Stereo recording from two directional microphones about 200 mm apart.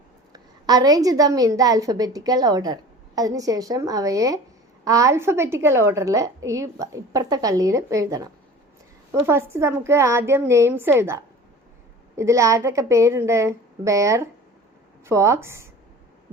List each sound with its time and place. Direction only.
0.3 s a woman's voice: 20° right (ahead or behind)